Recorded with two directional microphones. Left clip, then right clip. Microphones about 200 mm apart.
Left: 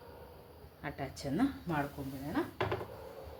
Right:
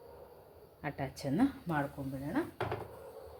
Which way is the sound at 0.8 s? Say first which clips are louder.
Right 2 dB; 35° right (ahead or behind).